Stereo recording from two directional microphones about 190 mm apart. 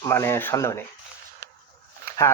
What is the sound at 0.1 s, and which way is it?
Speech, 15° left (ahead or behind).